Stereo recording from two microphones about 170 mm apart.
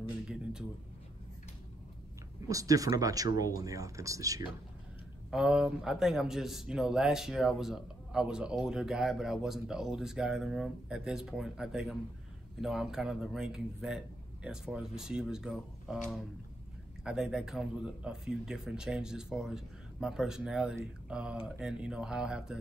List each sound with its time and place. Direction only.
0.3 s a sound: 5° right (ahead or behind)
2.4 s speech: 20° right (ahead or behind)
5.3 s speech: 5° right (ahead or behind)
17.0 s speech: 5° right (ahead or behind)